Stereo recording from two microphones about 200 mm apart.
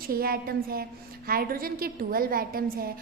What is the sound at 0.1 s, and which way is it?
A woman's voice, 50° right (ahead or behind).